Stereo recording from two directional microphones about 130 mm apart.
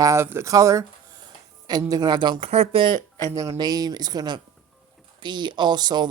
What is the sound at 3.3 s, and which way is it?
Speech, 25° right (ahead or behind).